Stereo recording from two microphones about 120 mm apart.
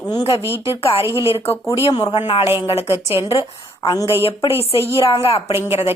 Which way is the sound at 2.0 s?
45° left (ahead or behind).